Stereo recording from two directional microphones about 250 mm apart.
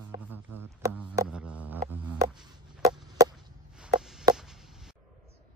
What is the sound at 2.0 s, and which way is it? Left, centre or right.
Chop, centre.